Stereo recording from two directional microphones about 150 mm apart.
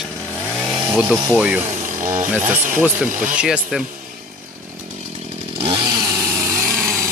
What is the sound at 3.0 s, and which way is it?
Speech, 60° right (ahead or behind).